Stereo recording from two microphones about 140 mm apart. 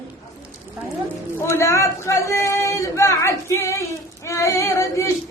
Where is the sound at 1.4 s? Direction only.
20° left (ahead or behind).